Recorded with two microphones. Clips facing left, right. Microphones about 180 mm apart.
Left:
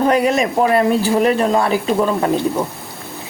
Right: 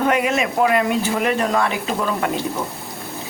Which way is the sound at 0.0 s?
35° left (ahead or behind).